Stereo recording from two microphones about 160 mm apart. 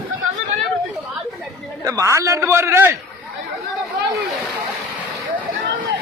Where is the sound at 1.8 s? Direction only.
20° right (ahead or behind).